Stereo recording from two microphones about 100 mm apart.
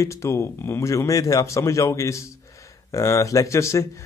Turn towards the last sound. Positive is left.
turn(degrees=30)  # may be behind; listen again after turning